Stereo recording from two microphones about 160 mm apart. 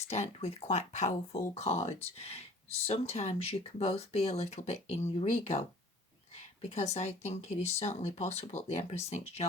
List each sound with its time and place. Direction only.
0.0 s speech: 45° left (ahead or behind)